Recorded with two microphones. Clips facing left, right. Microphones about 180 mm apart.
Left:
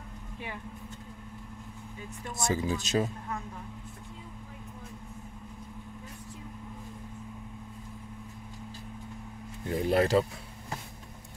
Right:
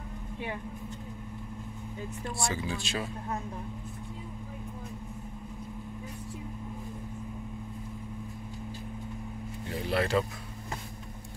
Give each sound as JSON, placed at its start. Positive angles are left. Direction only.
{"t": 2.5, "sound": "speech", "side_deg": 40}
{"t": 9.7, "sound": "speech", "side_deg": 45}